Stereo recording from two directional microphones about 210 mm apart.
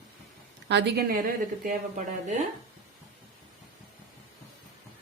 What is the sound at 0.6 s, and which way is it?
A woman's voice, 55° right (ahead or behind).